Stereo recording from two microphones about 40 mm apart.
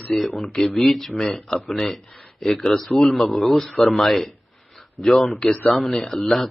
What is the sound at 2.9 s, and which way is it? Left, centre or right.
Speech, centre.